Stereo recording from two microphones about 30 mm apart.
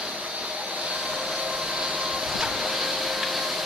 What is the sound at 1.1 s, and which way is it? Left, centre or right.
Train, centre.